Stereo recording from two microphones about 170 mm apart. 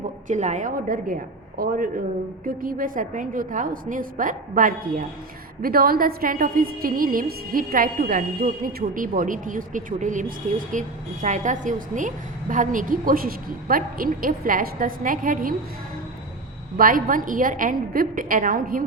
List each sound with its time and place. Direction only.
0.3 s a woman's voice: 45° right (ahead or behind)
16.7 s a woman's voice: 55° right (ahead or behind)